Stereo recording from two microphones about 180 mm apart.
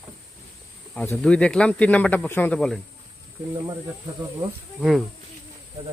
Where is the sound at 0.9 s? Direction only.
5° left (ahead or behind).